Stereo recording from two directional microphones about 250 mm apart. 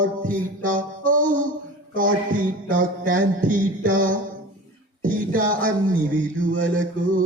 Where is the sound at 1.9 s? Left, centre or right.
Right.